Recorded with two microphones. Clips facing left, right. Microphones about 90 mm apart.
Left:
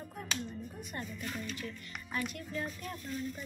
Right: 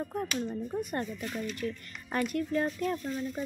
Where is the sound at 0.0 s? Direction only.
50° right (ahead or behind).